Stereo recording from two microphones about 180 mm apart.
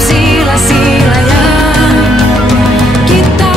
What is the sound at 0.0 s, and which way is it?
Music, centre (ahead or behind).